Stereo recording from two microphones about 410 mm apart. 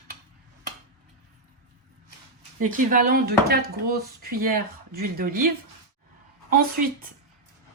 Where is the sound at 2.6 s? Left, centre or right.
Centre.